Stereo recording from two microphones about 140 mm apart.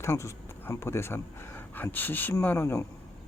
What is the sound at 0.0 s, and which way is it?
Speech, 20° left (ahead or behind).